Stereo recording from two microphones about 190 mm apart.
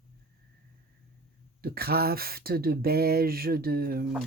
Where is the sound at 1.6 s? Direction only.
55° right (ahead or behind).